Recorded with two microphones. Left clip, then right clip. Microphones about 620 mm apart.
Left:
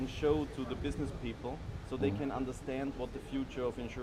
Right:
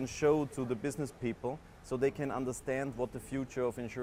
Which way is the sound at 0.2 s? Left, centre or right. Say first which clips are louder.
Right 3 dB; right.